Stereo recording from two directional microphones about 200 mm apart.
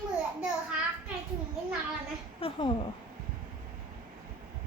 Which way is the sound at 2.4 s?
25° left (ahead or behind).